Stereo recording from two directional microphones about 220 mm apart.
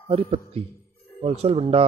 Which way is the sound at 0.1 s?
30° right (ahead or behind).